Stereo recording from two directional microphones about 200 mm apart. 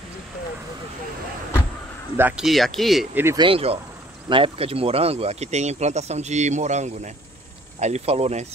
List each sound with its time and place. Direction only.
2.1 s speech: 5° right (ahead or behind)
3.3 s speech: 25° right (ahead or behind)